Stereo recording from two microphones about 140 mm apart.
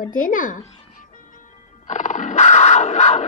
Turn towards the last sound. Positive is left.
turn(degrees=55)  # may be behind; listen again after turning